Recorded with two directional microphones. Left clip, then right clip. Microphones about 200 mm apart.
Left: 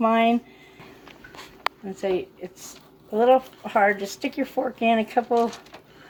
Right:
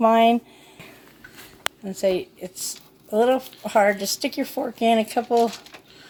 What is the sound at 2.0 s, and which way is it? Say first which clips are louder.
Speech: right 7 dB; 60° right (ahead or behind).